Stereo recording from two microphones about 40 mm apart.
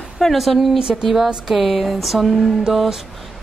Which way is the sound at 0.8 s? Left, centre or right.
Centre.